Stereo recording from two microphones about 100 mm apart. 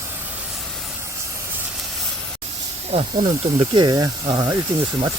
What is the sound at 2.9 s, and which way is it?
Speech, 75° right (ahead or behind).